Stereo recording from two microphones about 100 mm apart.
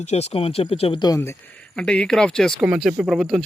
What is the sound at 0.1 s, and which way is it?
Speech, 90° left.